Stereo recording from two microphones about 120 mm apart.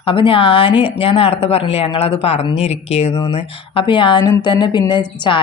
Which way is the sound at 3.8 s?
40° left (ahead or behind).